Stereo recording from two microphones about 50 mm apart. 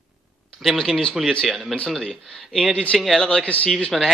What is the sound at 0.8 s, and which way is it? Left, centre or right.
Speech, centre.